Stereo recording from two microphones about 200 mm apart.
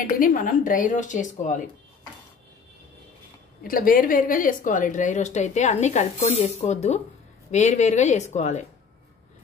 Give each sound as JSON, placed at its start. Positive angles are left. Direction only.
{"t": 0.1, "sound": "a woman's voice", "side_deg": 45}
{"t": 3.6, "sound": "a woman's voice", "side_deg": 45}